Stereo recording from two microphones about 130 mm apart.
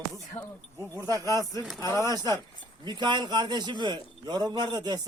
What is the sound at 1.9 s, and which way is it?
A man's voice, 30° right (ahead or behind).